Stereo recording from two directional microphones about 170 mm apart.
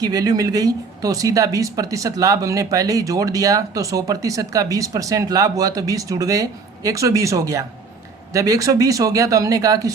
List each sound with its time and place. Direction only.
0.0 s speech: 20° right (ahead or behind)